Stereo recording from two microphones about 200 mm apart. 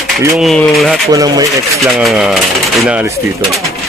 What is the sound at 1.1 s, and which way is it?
Speech, 20° right (ahead or behind).